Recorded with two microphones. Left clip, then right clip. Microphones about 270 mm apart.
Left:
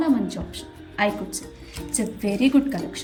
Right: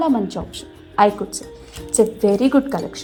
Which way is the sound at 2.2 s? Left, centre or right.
Right.